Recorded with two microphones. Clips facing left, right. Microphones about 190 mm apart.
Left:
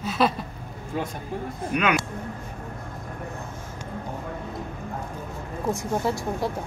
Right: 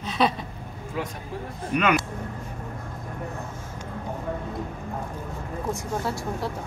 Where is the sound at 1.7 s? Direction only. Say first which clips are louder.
Right 1 dB; centre (ahead or behind).